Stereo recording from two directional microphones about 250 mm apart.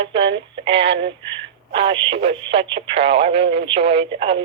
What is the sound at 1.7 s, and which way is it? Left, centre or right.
Speech, right.